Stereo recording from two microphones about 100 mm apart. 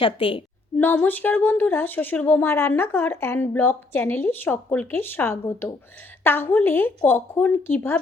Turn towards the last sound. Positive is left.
turn(degrees=20)  # may be behind; listen again after turning